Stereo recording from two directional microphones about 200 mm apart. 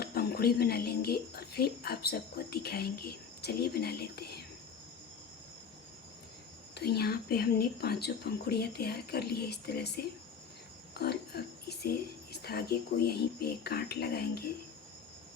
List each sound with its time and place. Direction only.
0.0 s speech: 50° left (ahead or behind)
6.7 s speech: 55° left (ahead or behind)